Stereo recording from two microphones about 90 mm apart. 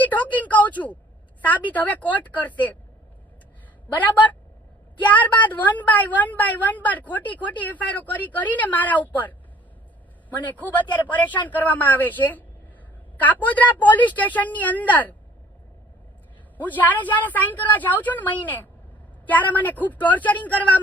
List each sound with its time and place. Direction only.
0.0 s a woman's voice: 20° left (ahead or behind)
3.9 s a woman's voice: 20° left (ahead or behind)
10.2 s a woman's voice: 20° left (ahead or behind)
16.6 s a woman's voice: 20° left (ahead or behind)